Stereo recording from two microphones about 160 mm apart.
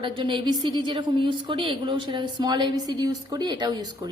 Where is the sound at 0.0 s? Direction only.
30° right (ahead or behind).